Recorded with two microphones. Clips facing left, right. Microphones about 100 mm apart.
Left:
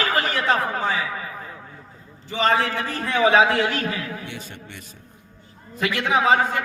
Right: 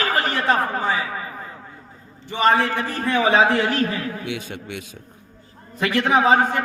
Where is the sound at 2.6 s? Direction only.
45° right (ahead or behind).